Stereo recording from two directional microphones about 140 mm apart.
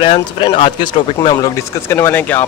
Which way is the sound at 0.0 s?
40° left (ahead or behind).